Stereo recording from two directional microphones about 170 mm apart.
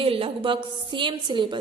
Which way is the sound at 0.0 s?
35° right (ahead or behind).